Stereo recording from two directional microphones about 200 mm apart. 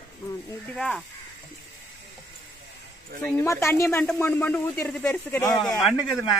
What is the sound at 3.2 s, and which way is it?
Speech, 15° left (ahead or behind).